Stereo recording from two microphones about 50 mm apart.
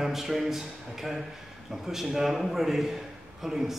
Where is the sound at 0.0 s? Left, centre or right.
Centre.